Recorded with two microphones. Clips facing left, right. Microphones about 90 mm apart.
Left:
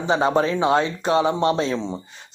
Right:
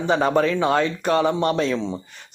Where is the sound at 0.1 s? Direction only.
25° left (ahead or behind).